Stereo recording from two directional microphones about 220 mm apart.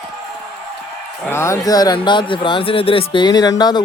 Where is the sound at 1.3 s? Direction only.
10° left (ahead or behind).